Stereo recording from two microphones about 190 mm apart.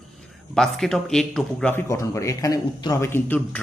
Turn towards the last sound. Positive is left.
turn(degrees=10)  # may be behind; listen again after turning